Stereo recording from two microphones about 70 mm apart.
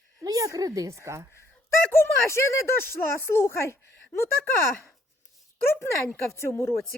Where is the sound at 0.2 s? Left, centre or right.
Right.